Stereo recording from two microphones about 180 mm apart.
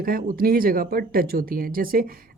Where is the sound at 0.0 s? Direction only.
55° right (ahead or behind).